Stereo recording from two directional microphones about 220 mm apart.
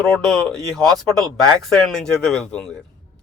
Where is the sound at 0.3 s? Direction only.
Centre (ahead or behind).